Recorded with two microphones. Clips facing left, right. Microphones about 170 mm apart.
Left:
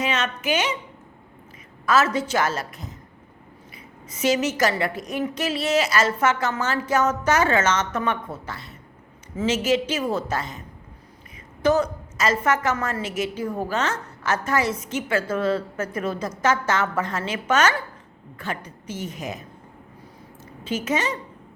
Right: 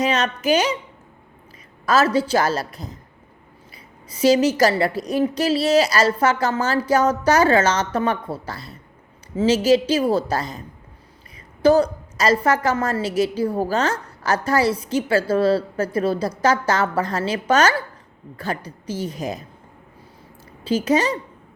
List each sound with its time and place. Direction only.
0.0 s a woman's voice: 35° right (ahead or behind)
1.9 s a woman's voice: 35° right (ahead or behind)
4.1 s a woman's voice: 35° right (ahead or behind)
11.6 s a woman's voice: 35° right (ahead or behind)
20.7 s a woman's voice: 35° right (ahead or behind)